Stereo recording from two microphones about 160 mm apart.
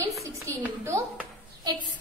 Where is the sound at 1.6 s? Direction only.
25° right (ahead or behind).